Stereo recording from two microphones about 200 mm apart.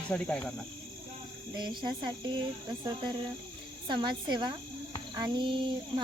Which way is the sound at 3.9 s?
20° right (ahead or behind).